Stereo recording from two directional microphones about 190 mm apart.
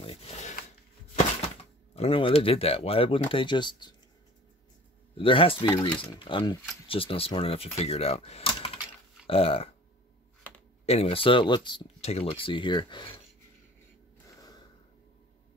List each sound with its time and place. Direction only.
0.0 s a sound: 30° left (ahead or behind)
2.0 s speech: 30° left (ahead or behind)
5.1 s speech: 30° left (ahead or behind)
10.9 s speech: 30° left (ahead or behind)